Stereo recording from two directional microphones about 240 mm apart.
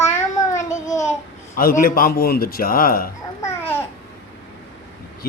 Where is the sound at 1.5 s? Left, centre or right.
Left.